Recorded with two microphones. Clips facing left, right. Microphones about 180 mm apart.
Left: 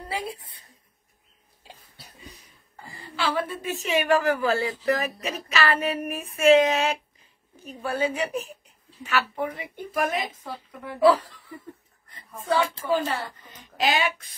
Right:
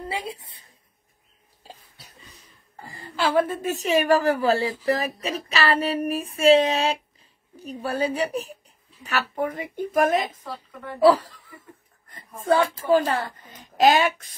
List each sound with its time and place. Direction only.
0.1 s a woman's voice: 25° right (ahead or behind)
2.8 s a woman's voice: 40° right (ahead or behind)
10.2 s a woman's voice: 10° left (ahead or behind)
12.1 s a sound: 50° right (ahead or behind)
12.9 s a woman's voice: 50° right (ahead or behind)